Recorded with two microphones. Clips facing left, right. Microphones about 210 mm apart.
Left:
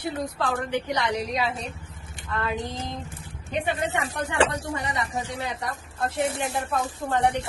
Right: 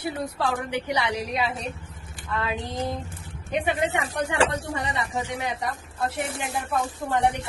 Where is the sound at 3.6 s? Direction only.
15° right (ahead or behind).